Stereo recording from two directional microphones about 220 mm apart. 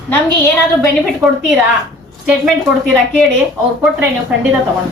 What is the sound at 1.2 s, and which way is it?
Speech, centre (ahead or behind).